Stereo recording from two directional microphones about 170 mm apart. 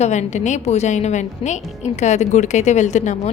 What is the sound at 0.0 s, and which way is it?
A woman's voice, 45° left (ahead or behind).